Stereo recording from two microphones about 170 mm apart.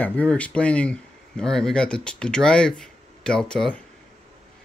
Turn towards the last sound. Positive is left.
turn(degrees=5)  # may be behind; listen again after turning